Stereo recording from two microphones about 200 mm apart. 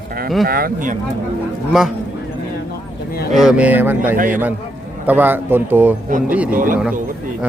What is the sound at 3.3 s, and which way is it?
Speech, 5° right (ahead or behind).